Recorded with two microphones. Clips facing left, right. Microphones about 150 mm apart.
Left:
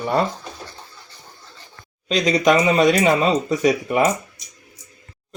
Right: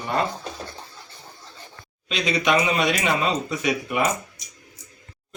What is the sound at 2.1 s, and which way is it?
Speech, 40° left (ahead or behind).